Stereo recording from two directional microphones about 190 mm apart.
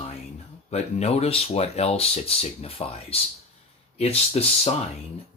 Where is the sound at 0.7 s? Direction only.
35° left (ahead or behind).